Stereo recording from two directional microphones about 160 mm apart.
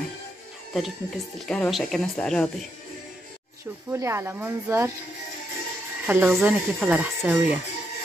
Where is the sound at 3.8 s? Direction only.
15° right (ahead or behind).